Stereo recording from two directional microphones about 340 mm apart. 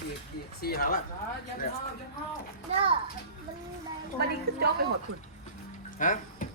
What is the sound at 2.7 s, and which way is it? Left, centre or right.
Speech, centre.